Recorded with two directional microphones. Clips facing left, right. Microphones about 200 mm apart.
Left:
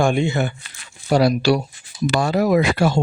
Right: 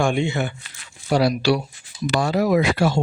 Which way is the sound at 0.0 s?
40° left (ahead or behind).